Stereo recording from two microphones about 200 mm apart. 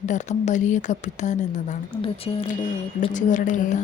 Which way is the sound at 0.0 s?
35° left (ahead or behind).